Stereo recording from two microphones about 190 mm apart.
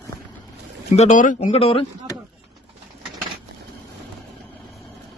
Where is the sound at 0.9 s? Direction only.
40° left (ahead or behind).